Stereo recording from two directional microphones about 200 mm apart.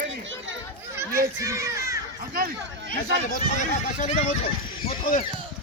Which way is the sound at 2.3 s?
45° right (ahead or behind).